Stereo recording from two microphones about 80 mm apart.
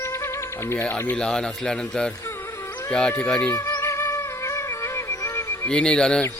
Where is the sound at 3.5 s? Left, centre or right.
Left.